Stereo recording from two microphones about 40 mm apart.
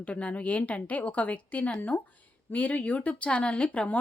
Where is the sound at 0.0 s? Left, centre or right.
Left.